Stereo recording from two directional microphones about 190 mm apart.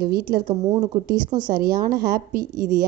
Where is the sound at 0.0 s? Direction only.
55° right (ahead or behind).